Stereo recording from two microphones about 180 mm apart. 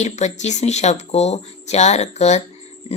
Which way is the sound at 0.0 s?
40° left (ahead or behind).